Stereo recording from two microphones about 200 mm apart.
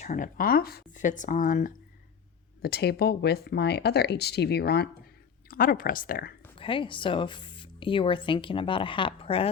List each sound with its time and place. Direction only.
0.0 s speech: 40° left (ahead or behind)
6.6 s speech: 25° left (ahead or behind)